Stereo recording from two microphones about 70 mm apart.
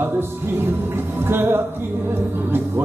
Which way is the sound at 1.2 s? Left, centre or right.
Right.